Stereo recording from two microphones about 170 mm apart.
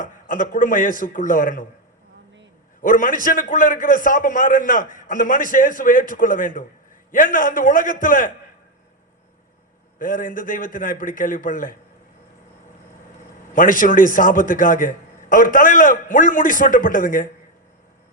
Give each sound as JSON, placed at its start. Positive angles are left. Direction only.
{"t": 0.0, "sound": "a man's voice", "side_deg": 50}
{"t": 2.8, "sound": "a man's voice", "side_deg": 50}
{"t": 10.0, "sound": "a man's voice", "side_deg": 50}
{"t": 13.5, "sound": "a man's voice", "side_deg": 50}